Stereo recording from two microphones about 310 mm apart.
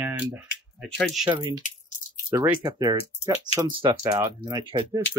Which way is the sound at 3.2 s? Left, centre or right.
Left.